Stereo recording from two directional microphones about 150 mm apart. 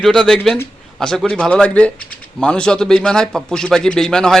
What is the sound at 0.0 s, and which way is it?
A man's voice, 5° left (ahead or behind).